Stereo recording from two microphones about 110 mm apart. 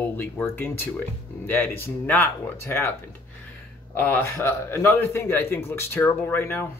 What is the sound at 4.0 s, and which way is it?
Speech, 20° left (ahead or behind).